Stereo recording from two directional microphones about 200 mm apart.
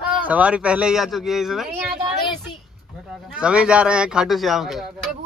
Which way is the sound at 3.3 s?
5° right (ahead or behind).